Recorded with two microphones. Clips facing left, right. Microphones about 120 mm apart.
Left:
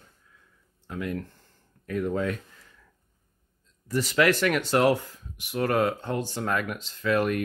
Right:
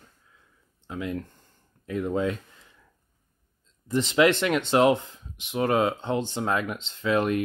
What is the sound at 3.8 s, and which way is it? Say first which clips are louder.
Speech: right 2 dB; 25° right (ahead or behind).